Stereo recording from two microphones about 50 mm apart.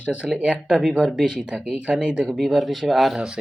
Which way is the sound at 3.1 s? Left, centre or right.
Centre.